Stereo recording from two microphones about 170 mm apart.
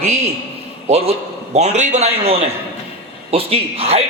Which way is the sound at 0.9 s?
40° right (ahead or behind).